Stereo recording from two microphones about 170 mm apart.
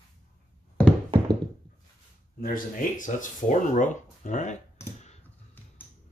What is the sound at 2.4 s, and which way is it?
Speech, 55° left (ahead or behind).